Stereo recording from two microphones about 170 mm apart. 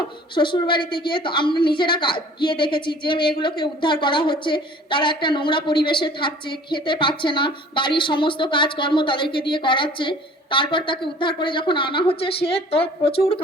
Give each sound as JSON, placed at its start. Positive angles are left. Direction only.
{"t": 0.3, "sound": "a woman's voice", "side_deg": 30}